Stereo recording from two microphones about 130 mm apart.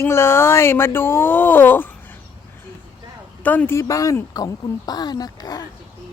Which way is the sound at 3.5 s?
15° left (ahead or behind).